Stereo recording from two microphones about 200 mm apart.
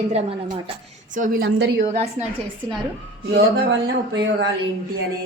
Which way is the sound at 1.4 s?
60° right (ahead or behind).